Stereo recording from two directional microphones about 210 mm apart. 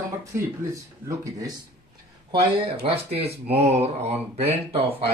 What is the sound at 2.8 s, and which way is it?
Speech, 25° right (ahead or behind).